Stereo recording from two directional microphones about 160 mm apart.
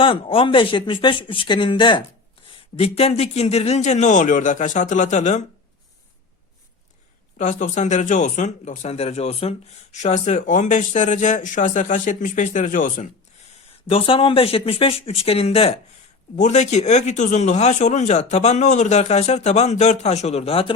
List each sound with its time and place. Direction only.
0.0 s speech: 35° left (ahead or behind)
7.3 s speech: 50° left (ahead or behind)
13.9 s speech: 35° left (ahead or behind)